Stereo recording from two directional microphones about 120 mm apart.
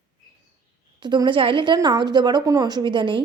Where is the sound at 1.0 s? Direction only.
40° right (ahead or behind).